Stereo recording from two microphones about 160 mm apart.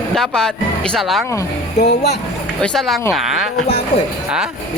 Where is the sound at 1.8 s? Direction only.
90° left.